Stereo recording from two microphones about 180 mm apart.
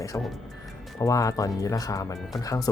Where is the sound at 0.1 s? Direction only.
15° left (ahead or behind).